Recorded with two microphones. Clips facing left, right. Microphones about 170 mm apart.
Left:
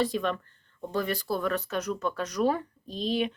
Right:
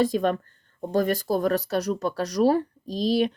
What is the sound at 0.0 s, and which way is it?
Speech, 45° right (ahead or behind).